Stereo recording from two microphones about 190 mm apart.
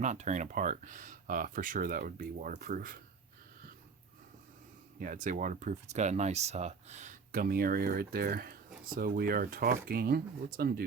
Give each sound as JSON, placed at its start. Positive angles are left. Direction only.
{"t": 0.0, "sound": "speech", "side_deg": -40}
{"t": 4.9, "sound": "speech", "side_deg": -45}